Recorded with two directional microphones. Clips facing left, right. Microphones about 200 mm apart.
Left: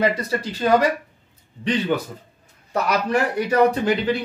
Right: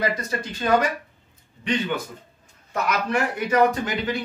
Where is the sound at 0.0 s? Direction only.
30° left (ahead or behind).